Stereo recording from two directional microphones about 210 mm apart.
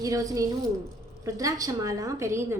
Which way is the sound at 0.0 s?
15° right (ahead or behind).